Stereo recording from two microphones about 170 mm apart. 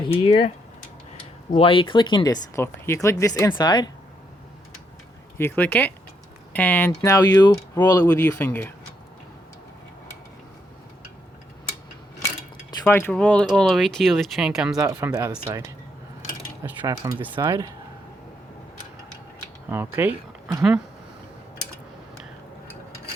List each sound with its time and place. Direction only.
0.0 s speech: 35° left (ahead or behind)
1.5 s speech: 30° left (ahead or behind)
5.4 s speech: 10° left (ahead or behind)
12.8 s speech: 10° left (ahead or behind); by 15.4 s 10° right (ahead or behind)
16.8 s speech: 20° right (ahead or behind)
19.7 s speech: 10° right (ahead or behind)